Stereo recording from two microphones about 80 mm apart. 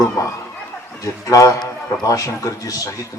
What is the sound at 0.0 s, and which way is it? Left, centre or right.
A man's voice, left.